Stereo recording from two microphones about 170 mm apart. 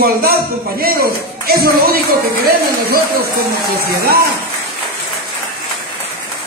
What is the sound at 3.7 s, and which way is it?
Speech, 65° right (ahead or behind).